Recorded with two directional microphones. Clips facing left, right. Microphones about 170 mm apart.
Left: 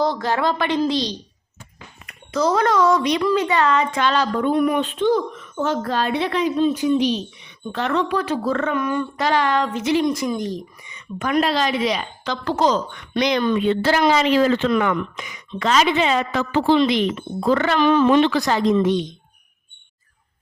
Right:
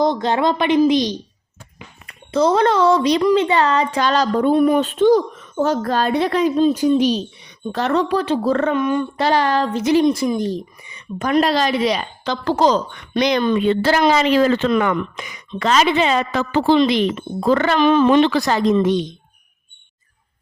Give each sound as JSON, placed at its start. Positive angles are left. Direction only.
{"t": 0.0, "sound": "a woman's voice", "side_deg": -20}
{"t": 8.8, "sound": "a woman's voice", "side_deg": -20}
{"t": 9.2, "sound": "speech", "side_deg": -35}
{"t": 17.7, "sound": "speech", "side_deg": -20}